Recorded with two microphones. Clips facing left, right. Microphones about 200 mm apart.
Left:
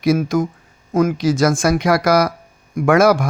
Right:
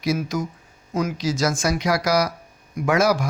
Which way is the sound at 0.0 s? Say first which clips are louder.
Left 7 dB; 55° left (ahead or behind).